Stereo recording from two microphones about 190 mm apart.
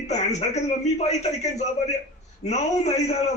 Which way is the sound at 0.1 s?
35° left (ahead or behind).